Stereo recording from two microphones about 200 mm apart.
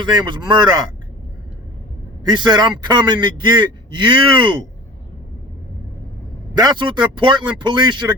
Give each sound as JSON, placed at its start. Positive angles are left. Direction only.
{"t": 0.0, "sound": "speech", "side_deg": -20}
{"t": 2.2, "sound": "speech", "side_deg": -20}
{"t": 6.5, "sound": "speech", "side_deg": -20}